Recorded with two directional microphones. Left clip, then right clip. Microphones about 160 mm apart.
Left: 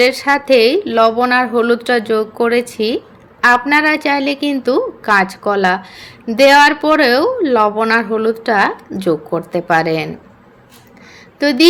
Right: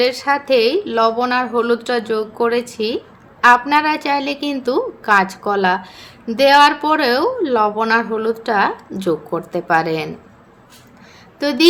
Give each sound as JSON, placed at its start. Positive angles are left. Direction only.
{"t": 0.0, "sound": "a woman's voice", "side_deg": 20}
{"t": 11.3, "sound": "speech", "side_deg": 15}